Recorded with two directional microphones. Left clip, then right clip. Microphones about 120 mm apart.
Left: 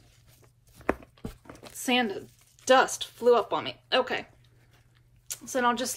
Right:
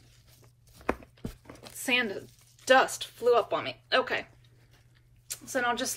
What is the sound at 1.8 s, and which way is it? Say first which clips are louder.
Speech: left 1 dB; 20° left (ahead or behind).